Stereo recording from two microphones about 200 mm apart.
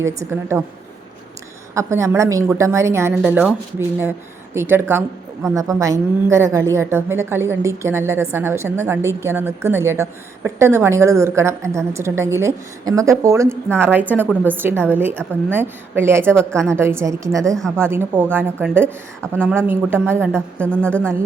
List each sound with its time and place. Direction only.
0.3 s a woman's voice: 15° right (ahead or behind)
1.7 s a woman's voice: 15° right (ahead or behind)
4.5 s a woman's voice: 10° right (ahead or behind)
16.2 s speech: 5° left (ahead or behind)
16.6 s a woman's voice: 15° right (ahead or behind)
20.7 s speech: 5° left (ahead or behind)